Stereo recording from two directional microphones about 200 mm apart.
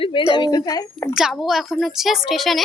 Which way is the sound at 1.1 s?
Centre (ahead or behind).